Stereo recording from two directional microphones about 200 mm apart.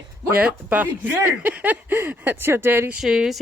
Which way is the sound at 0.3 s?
5° right (ahead or behind).